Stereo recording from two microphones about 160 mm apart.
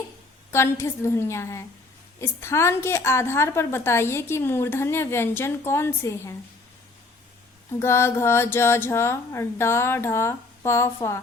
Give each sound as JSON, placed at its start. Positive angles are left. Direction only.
{"t": 0.5, "sound": "a woman's voice", "side_deg": 15}
{"t": 7.8, "sound": "a woman's voice", "side_deg": 15}